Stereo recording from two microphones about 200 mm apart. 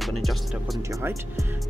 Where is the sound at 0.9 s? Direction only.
15° right (ahead or behind).